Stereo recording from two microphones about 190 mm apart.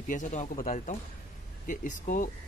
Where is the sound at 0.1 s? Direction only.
40° left (ahead or behind).